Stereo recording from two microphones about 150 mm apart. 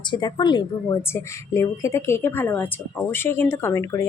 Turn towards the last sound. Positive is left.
turn(degrees=15)  # may be behind; listen again after turning